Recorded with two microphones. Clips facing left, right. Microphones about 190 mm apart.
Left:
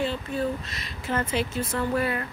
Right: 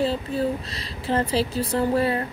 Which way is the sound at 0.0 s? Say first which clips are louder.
Right 4 dB; 35° right (ahead or behind).